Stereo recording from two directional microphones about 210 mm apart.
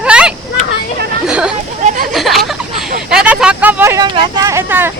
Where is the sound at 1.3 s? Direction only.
5° right (ahead or behind).